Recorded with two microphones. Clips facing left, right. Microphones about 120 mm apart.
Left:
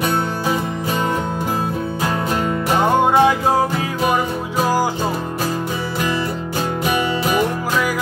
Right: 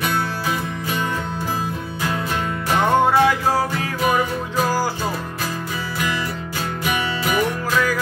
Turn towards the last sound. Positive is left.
turn(degrees=30)  # may be behind; listen again after turning